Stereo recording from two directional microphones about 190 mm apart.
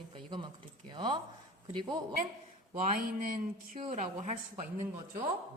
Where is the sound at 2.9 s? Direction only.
45° right (ahead or behind).